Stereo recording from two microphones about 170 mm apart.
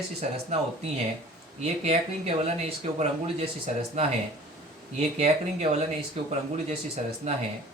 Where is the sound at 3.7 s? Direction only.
40° right (ahead or behind).